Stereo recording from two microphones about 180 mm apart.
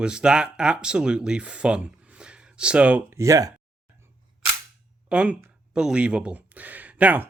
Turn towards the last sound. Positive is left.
turn(degrees=-10)  # may be behind; listen again after turning